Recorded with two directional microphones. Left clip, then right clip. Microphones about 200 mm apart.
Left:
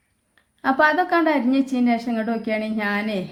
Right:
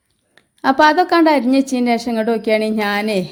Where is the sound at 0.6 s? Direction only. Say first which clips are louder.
Right 6 dB; 40° right (ahead or behind).